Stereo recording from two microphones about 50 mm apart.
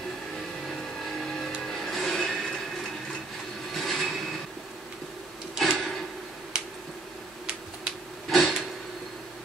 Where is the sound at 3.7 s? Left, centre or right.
Centre.